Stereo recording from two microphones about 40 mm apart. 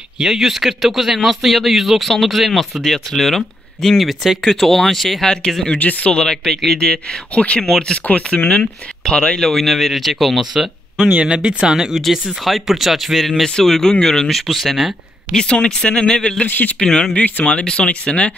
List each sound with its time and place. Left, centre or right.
0.2 s speech: centre
4.5 s speech: centre
5.2 s speech: left
5.8 s speech: left
6.1 s speech: centre
7.3 s speech: left
9.5 s speech: centre
11.2 s speech: right
11.7 s speech: centre
13.4 s speech: centre
15.3 s speech: left
16.4 s speech: left
16.8 s speech: centre
17.5 s speech: left